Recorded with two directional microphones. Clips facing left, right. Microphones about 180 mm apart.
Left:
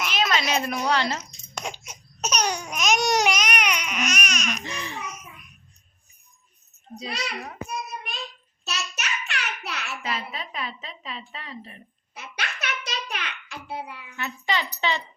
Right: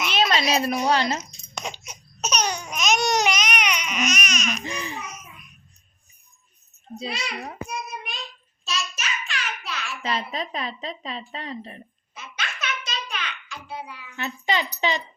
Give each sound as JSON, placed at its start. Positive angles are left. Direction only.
{"t": 0.2, "sound": "a woman's voice", "side_deg": -30}
{"t": 1.5, "sound": "a sound", "side_deg": 10}
{"t": 4.6, "sound": "speech", "side_deg": -15}
{"t": 7.7, "sound": "child singing", "side_deg": 0}
{"t": 8.6, "sound": "child singing", "side_deg": 65}
{"t": 10.0, "sound": "a woman's voice", "side_deg": -35}
{"t": 12.1, "sound": "a sound", "side_deg": 65}
{"t": 14.2, "sound": "speech", "side_deg": -20}